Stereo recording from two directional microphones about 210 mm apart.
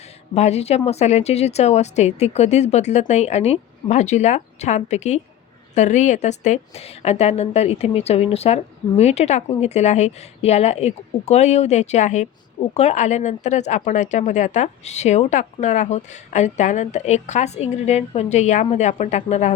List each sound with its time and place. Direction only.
0.3 s a woman's voice: 30° left (ahead or behind)